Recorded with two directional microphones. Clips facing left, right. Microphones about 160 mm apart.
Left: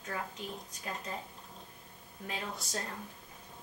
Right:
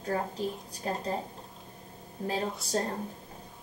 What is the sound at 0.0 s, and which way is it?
A woman's voice, 35° right (ahead or behind).